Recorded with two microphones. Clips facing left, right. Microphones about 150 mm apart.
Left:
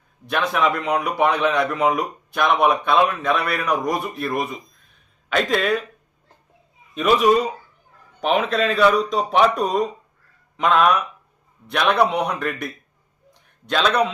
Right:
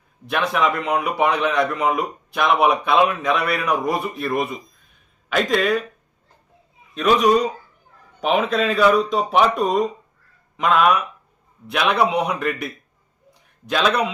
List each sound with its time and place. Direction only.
0.3 s a man's voice: centre (ahead or behind)
6.9 s a man's voice: 5° left (ahead or behind)